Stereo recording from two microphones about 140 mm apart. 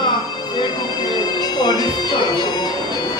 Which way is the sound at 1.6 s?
30° left (ahead or behind).